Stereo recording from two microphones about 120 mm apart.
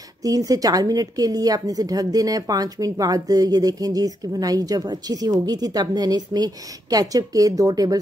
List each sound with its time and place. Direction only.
0.2 s a woman's voice: 30° right (ahead or behind)